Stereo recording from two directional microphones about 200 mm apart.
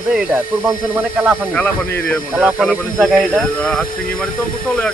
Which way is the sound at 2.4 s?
5° right (ahead or behind).